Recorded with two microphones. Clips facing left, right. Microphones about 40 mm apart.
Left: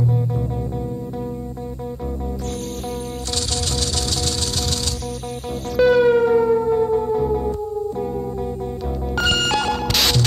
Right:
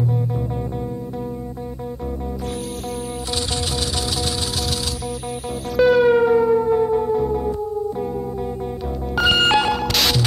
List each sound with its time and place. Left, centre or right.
5.8 s music: centre
9.1 s music: centre
9.8 s music: centre